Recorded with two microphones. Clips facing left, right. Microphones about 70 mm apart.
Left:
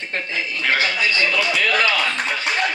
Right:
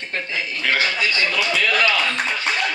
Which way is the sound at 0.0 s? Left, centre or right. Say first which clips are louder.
Left 1 dB; left.